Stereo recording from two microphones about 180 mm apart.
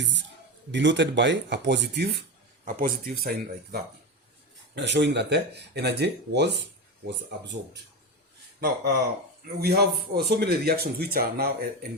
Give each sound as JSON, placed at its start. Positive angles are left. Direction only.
{"t": 0.7, "sound": "speech", "side_deg": -85}
{"t": 2.6, "sound": "speech", "side_deg": -50}
{"t": 4.7, "sound": "speech", "side_deg": -75}
{"t": 8.6, "sound": "speech", "side_deg": -65}